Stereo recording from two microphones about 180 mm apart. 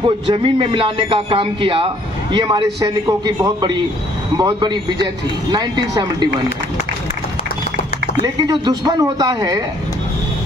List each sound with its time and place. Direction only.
0.0 s a man's voice: 25° right (ahead or behind)
8.5 s a man's voice: 25° right (ahead or behind)